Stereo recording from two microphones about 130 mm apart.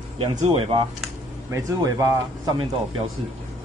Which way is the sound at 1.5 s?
25° right (ahead or behind).